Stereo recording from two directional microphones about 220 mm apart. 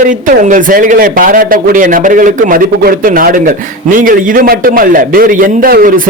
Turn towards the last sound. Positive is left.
turn(degrees=-40)  # may be behind; listen again after turning